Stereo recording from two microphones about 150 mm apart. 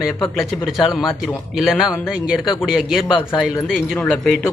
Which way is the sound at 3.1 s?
30° left (ahead or behind).